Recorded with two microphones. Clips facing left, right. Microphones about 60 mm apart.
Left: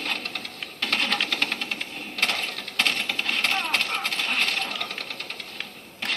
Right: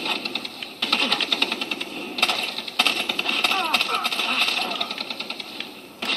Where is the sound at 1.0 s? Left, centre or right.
Left.